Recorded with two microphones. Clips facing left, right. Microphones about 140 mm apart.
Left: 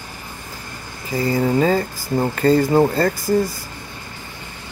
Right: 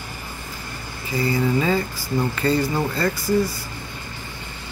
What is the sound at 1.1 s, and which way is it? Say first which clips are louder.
Speech: left 3 dB; 45° left (ahead or behind).